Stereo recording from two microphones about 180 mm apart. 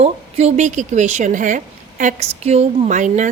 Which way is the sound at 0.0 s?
35° right (ahead or behind).